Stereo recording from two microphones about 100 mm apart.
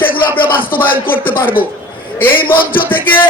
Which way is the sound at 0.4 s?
20° left (ahead or behind).